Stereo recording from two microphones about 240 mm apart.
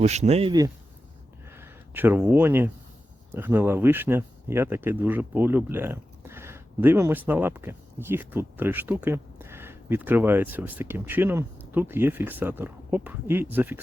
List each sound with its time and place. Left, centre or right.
0.0 s speech: right; by 13.7 s centre